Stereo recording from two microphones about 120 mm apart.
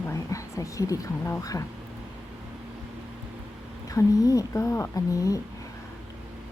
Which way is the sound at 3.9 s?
30° left (ahead or behind).